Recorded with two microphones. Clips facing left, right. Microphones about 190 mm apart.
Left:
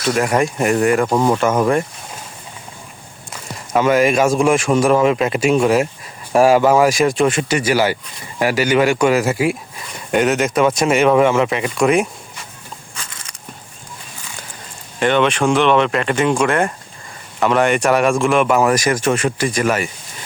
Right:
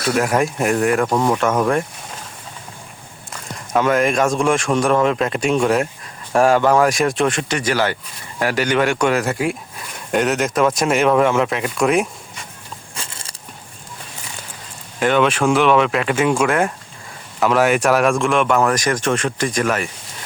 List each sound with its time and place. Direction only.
0.0 s speech: centre (ahead or behind)
3.7 s speech: centre (ahead or behind)
13.1 s a sound: 30° right (ahead or behind)
14.9 s speech: centre (ahead or behind)